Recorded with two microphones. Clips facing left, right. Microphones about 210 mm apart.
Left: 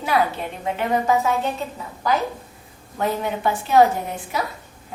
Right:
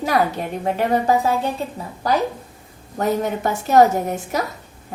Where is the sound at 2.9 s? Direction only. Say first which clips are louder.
Right 3 dB; 45° right (ahead or behind).